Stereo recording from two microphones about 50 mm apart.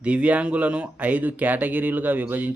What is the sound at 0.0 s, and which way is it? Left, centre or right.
A man's voice, right.